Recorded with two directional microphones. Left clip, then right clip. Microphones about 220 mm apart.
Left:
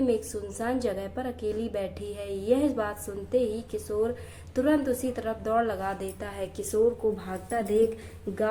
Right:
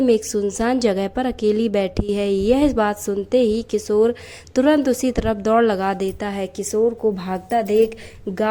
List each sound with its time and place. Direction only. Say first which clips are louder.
0.0 s a woman's voice: right 10 dB; 40° right (ahead or behind)